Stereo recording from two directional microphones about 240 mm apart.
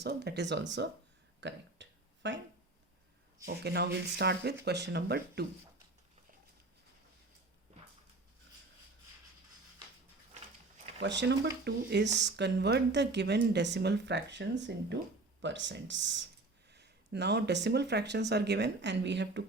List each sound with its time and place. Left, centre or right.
0.0 s speech: right
1.4 s a sound: right
3.4 s speech: right
11.0 s speech: right